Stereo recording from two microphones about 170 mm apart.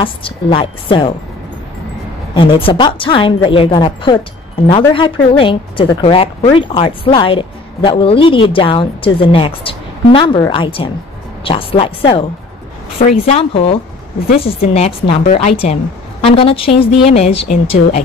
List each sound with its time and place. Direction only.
0.0 s a woman's voice: 30° left (ahead or behind)
2.3 s a woman's voice: 30° left (ahead or behind)